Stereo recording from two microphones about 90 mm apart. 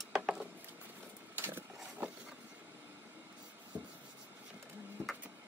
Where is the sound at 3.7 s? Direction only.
30° right (ahead or behind).